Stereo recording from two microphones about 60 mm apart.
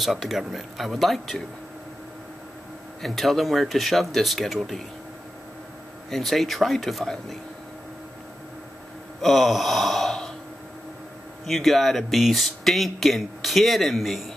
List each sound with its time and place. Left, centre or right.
0.0 s speech: centre
3.0 s speech: centre
6.0 s speech: centre
9.2 s gasp: centre
11.4 s speech: centre